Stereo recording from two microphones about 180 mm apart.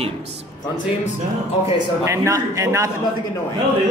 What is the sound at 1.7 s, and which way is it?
A man's voice, 15° right (ahead or behind).